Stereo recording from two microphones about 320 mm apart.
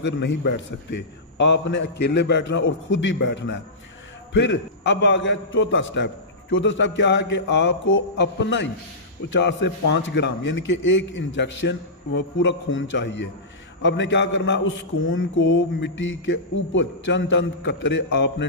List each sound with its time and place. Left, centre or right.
0.0 s a man's voice: left